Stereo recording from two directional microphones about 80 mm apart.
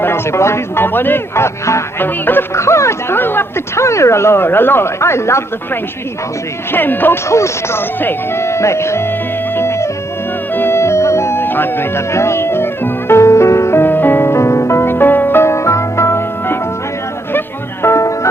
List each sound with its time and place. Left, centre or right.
0.0 s speech: left
1.6 s speech: left
6.7 s speech: left
7.3 s speech: left
9.6 s music: left
17.8 s music: left